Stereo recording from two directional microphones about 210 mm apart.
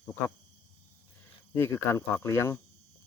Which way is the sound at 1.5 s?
10° left (ahead or behind).